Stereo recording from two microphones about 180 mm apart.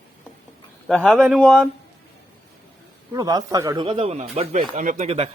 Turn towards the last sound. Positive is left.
turn(degrees=-30)  # may be behind; listen again after turning